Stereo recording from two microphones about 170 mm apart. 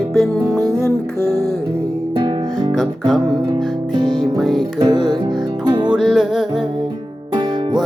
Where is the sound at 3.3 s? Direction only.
25° right (ahead or behind).